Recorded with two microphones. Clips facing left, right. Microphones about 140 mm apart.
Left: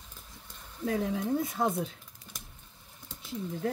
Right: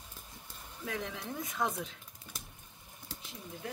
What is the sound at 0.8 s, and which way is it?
Speech, 40° left (ahead or behind).